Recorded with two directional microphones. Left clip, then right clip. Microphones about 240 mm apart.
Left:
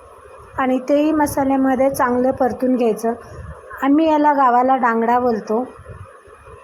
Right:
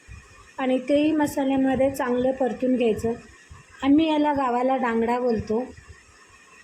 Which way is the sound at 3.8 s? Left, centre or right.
Centre.